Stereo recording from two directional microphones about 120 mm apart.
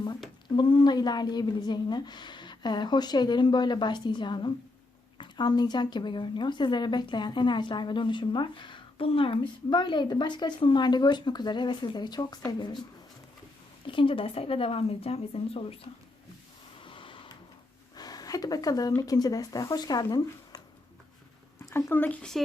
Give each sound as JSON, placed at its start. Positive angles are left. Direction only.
{"t": 0.5, "sound": "a woman's voice", "side_deg": 40}
{"t": 13.8, "sound": "speech", "side_deg": 45}
{"t": 16.8, "sound": "printer", "side_deg": 45}
{"t": 17.9, "sound": "speech", "side_deg": 35}
{"t": 21.6, "sound": "speech", "side_deg": 20}